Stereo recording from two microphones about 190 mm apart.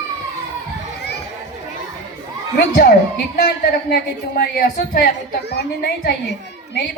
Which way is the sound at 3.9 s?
55° left (ahead or behind).